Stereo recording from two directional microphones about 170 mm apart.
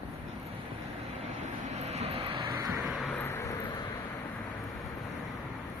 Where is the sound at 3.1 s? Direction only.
10° left (ahead or behind).